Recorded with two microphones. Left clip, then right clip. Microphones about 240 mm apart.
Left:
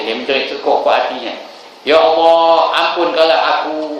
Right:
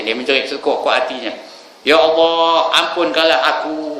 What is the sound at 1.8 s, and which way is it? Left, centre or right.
A man's voice, right.